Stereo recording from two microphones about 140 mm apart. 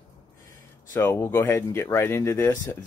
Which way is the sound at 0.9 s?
15° left (ahead or behind).